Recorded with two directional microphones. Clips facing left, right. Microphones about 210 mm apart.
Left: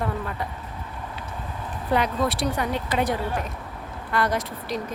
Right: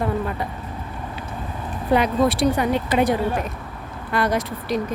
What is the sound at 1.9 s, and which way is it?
A woman's voice, 15° right (ahead or behind).